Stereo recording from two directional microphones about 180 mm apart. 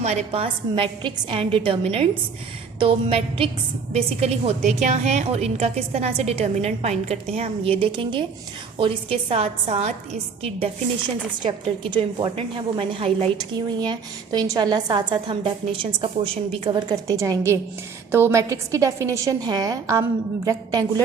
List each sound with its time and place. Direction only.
0.0 s a woman's voice: 40° right (ahead or behind)
11.9 s a woman's voice: 25° right (ahead or behind)